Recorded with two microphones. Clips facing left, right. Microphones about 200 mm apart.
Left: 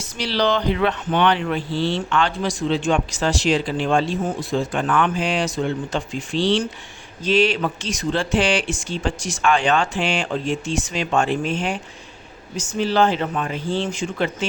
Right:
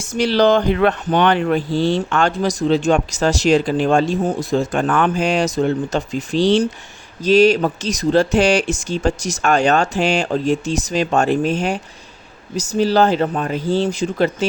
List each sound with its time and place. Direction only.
0.1 s speech: 50° right (ahead or behind)